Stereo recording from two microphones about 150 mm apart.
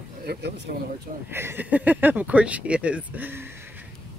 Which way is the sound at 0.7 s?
90° right.